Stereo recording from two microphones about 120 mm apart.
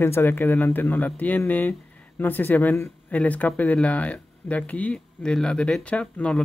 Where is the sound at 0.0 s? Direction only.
20° left (ahead or behind).